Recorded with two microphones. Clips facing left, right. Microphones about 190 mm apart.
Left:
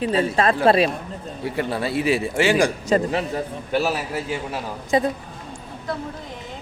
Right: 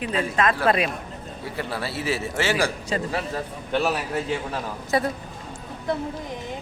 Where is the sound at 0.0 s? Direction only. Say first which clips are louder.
Left 4 dB; 30° left (ahead or behind).